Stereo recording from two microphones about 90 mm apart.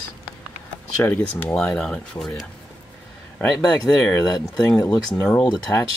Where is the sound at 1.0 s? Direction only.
20° left (ahead or behind).